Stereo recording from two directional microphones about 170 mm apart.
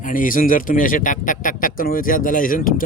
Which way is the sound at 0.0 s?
50° left (ahead or behind).